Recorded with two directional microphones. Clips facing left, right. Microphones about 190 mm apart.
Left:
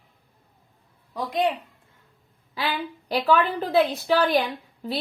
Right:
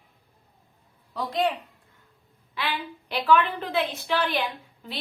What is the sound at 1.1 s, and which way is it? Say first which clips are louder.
Speech: left 2 dB; 15° left (ahead or behind).